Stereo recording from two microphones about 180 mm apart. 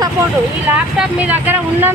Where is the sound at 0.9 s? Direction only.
10° right (ahead or behind).